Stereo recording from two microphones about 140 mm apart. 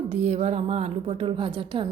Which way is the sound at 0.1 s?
50° right (ahead or behind).